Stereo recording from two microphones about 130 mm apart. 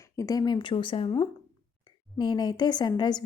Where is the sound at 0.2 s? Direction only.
30° left (ahead or behind).